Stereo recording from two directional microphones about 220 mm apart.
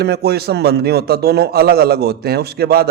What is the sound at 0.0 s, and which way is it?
A man's voice, 45° right (ahead or behind).